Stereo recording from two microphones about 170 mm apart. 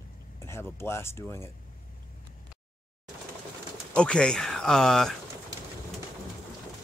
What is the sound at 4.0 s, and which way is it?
Speech, 5° left (ahead or behind).